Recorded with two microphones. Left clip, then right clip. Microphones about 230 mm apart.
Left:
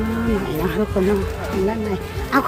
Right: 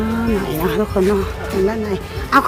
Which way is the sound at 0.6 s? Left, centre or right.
Centre.